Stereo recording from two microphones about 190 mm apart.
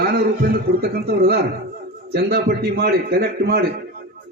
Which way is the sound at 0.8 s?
55° right (ahead or behind).